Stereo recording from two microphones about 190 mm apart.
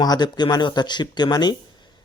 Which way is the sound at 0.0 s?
20° left (ahead or behind).